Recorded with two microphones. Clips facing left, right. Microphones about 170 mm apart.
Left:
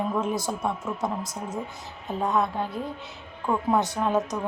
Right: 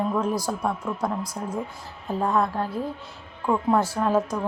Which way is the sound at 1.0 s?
20° left (ahead or behind).